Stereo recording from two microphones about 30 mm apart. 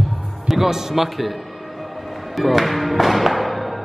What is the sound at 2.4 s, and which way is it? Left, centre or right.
Music, centre.